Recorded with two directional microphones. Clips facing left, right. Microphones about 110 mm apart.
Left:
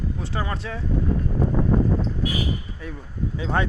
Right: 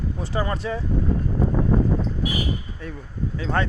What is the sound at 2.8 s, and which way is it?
Speech, 10° left (ahead or behind).